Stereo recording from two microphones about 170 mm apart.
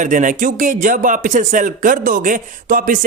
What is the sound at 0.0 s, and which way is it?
Speech, 50° right (ahead or behind).